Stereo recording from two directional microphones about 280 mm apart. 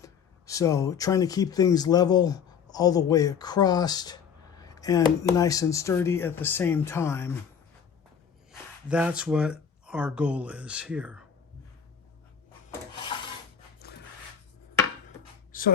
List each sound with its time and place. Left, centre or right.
0.0 s speech: centre
8.9 s speech: centre
15.5 s a sound: left